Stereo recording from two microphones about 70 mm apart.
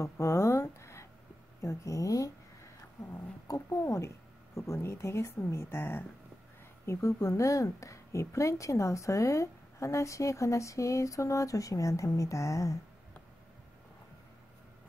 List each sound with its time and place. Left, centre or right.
0.0 s a sound: left
1.6 s speech: left
4.6 s speech: left
6.9 s speech: left